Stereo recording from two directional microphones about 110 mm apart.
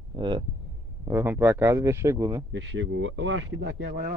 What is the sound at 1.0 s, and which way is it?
Speech, 20° right (ahead or behind).